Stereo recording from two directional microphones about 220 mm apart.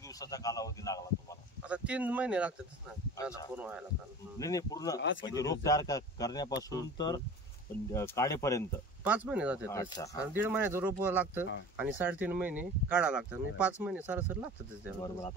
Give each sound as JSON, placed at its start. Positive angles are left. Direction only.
{"t": 0.2, "sound": "a man's voice", "side_deg": 15}
{"t": 1.7, "sound": "speech", "side_deg": -5}
{"t": 4.4, "sound": "a man's voice", "side_deg": 15}
{"t": 9.0, "sound": "speech", "side_deg": -5}
{"t": 9.7, "sound": "a man's voice", "side_deg": 15}
{"t": 10.3, "sound": "speech", "side_deg": -10}
{"t": 15.0, "sound": "a man's voice", "side_deg": 15}